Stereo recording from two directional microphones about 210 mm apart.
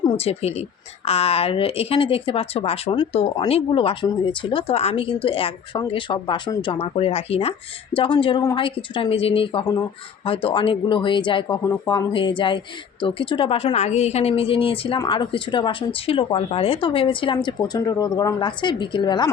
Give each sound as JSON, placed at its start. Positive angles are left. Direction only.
{"t": 0.0, "sound": "speech", "side_deg": 30}